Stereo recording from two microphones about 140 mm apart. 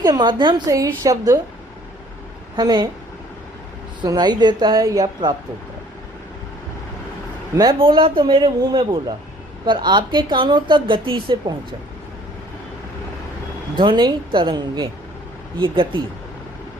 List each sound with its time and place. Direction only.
0.0 s a woman's voice: 30° right (ahead or behind)
2.6 s a woman's voice: 30° right (ahead or behind)
4.0 s a woman's voice: 30° right (ahead or behind)
7.7 s a woman's voice: 40° right (ahead or behind)
13.7 s a woman's voice: 30° right (ahead or behind)